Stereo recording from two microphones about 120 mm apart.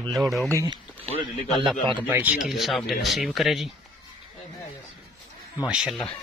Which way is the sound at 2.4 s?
Centre (ahead or behind).